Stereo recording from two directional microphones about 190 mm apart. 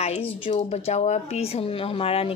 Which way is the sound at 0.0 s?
35° left (ahead or behind).